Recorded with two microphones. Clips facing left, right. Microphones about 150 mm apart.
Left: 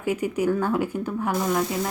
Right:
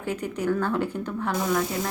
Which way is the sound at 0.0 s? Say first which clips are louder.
Left 4 dB; 10° left (ahead or behind).